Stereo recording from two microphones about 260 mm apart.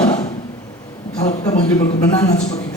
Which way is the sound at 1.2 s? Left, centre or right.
Left.